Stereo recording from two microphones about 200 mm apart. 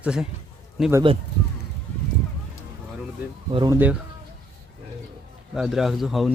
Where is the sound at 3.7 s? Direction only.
10° right (ahead or behind).